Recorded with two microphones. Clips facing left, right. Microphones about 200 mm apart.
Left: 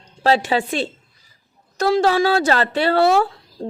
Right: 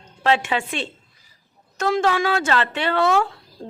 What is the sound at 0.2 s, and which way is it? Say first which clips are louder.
Speech: left 3 dB; 35° left (ahead or behind).